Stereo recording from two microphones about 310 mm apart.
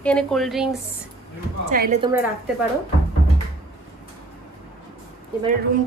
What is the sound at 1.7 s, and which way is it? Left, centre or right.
Speech, right.